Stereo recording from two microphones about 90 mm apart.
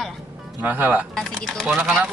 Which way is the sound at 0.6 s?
20° right (ahead or behind).